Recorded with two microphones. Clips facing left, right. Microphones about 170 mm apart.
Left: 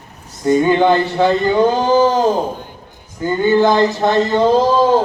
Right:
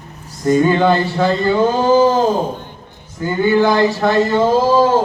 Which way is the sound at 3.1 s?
20° left (ahead or behind).